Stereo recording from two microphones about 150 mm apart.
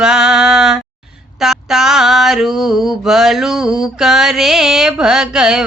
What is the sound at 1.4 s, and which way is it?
Female singing, centre (ahead or behind).